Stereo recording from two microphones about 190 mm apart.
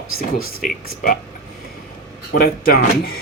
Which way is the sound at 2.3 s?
55° left (ahead or behind).